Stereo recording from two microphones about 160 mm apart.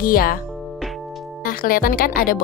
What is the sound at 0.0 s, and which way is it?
Speech, 65° left (ahead or behind).